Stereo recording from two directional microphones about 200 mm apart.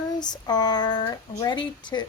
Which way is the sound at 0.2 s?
20° left (ahead or behind).